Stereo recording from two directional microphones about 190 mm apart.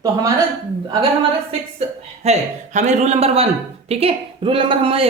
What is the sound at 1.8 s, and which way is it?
Speech, 35° right (ahead or behind).